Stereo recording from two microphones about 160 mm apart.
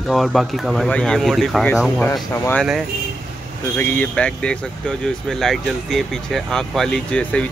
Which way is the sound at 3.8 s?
10° left (ahead or behind).